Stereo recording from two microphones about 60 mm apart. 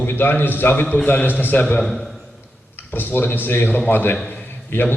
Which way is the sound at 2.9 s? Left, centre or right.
Left.